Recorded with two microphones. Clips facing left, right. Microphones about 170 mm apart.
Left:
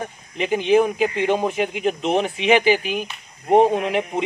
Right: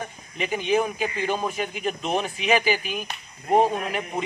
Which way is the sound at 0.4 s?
25° left (ahead or behind).